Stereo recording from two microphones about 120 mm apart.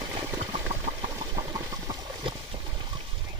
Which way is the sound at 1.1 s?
35° right (ahead or behind).